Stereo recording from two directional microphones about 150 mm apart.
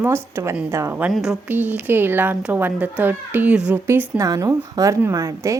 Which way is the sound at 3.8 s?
20° right (ahead or behind).